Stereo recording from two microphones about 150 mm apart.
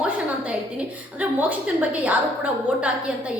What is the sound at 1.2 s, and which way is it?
A woman's voice, 10° right (ahead or behind).